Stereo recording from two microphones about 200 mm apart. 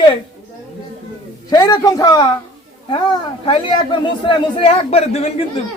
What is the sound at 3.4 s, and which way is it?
Speech, 25° left (ahead or behind).